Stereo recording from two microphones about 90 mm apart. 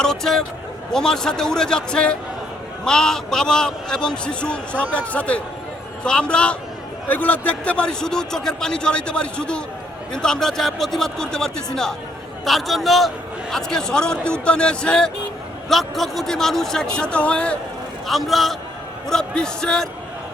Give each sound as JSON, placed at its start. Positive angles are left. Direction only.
{"t": 0.0, "sound": "a man's voice", "side_deg": 5}
{"t": 18.1, "sound": "speech", "side_deg": 0}